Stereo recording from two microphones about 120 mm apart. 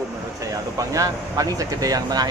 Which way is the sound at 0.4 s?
30° right (ahead or behind).